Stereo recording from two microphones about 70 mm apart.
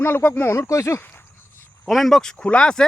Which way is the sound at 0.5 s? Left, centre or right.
Left.